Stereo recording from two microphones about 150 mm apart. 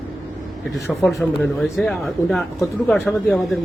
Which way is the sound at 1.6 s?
Centre (ahead or behind).